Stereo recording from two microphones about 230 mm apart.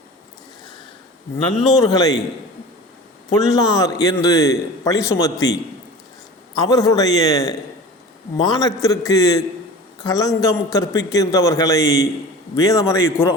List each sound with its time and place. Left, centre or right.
1.6 s a man's voice: centre
3.3 s a man's voice: centre
6.6 s a man's voice: centre